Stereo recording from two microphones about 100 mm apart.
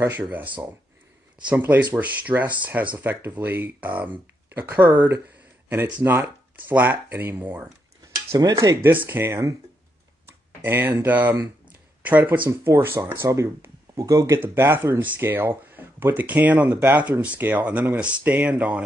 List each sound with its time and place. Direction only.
0.2 s speech: 15° right (ahead or behind)
8.3 s cutlery: 35° right (ahead or behind)
8.8 s speech: 20° right (ahead or behind)
10.6 s speech: 20° right (ahead or behind)